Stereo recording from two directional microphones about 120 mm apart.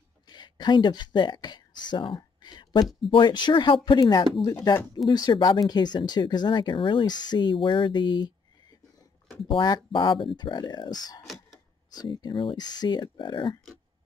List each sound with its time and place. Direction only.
0.3 s speech: 40° left (ahead or behind)